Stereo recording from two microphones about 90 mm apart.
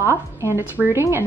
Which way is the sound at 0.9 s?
30° right (ahead or behind).